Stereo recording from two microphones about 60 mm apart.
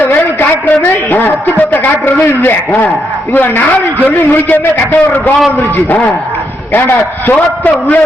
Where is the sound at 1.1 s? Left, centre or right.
Left.